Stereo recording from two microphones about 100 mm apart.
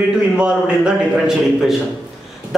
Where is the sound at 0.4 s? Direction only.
10° right (ahead or behind).